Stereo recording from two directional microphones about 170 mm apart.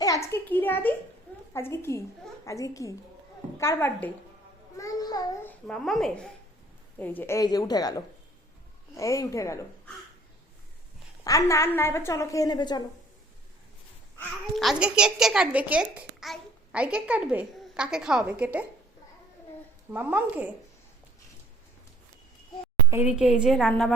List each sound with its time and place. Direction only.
0.0 s a child's voice: 20° left (ahead or behind)
5.6 s a woman's voice: centre (ahead or behind); by 9.9 s 15° left (ahead or behind)
11.2 s a woman's voice: 20° left (ahead or behind)
14.5 s a woman's voice: centre (ahead or behind)
19.9 s speech: 10° right (ahead or behind)
22.9 s a woman's voice: 10° right (ahead or behind)